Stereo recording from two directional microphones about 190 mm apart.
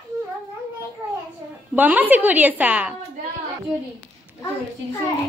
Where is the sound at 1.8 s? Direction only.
10° right (ahead or behind).